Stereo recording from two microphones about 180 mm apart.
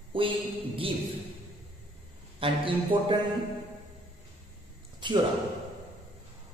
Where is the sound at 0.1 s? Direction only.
30° right (ahead or behind).